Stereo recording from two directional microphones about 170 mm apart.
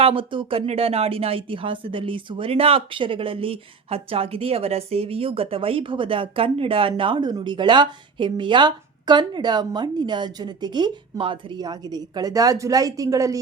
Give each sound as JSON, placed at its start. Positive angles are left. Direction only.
{"t": 0.0, "sound": "speech", "side_deg": -30}